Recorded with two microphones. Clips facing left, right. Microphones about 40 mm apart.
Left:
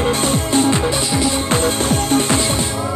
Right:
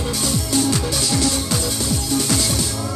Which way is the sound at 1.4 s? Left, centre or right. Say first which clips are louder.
Left 6 dB; left.